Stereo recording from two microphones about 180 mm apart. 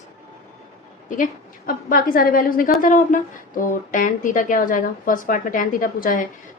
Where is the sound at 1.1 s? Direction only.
50° left (ahead or behind).